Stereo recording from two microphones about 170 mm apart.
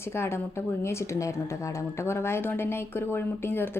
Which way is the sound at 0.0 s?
15° left (ahead or behind).